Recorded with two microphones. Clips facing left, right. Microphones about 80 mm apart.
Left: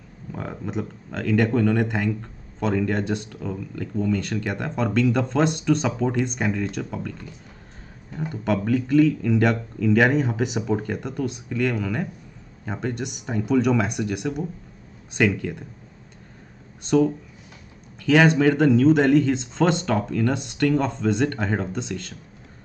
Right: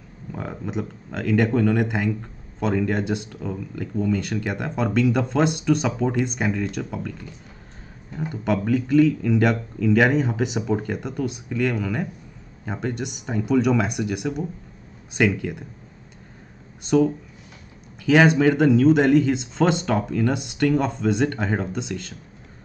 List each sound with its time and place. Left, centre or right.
0.3 s speech: centre
16.8 s speech: centre